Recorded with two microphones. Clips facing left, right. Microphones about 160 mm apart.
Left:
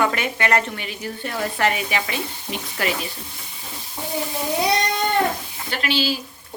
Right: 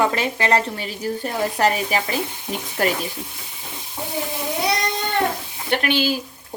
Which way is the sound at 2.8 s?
45° right (ahead or behind).